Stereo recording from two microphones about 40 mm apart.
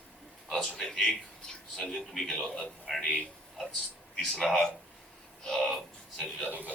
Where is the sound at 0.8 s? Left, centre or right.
Centre.